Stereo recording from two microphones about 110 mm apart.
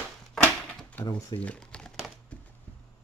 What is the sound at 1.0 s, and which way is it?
Speech, 35° left (ahead or behind).